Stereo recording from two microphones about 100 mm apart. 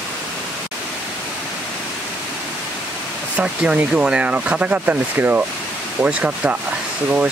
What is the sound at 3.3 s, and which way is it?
Speech, 10° right (ahead or behind).